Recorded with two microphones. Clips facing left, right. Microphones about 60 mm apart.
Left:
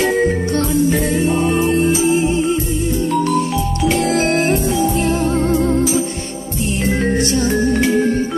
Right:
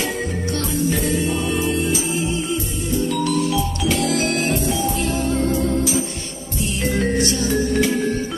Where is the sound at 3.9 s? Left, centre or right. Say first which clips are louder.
Left 5 dB; left.